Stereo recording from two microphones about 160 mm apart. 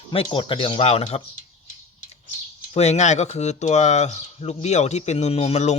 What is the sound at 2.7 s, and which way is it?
Speech, 45° left (ahead or behind).